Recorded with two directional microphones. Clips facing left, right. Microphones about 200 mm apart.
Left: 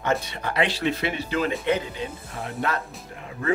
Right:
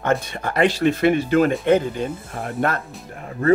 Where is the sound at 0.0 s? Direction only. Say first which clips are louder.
Right 4 dB; 50° right (ahead or behind).